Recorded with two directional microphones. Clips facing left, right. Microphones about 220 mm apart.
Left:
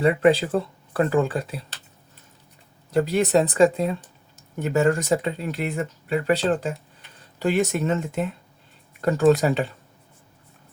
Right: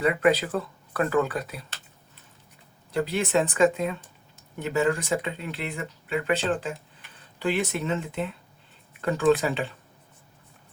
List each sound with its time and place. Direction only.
0.0 s speech: 30° left (ahead or behind)
2.9 s speech: 45° left (ahead or behind)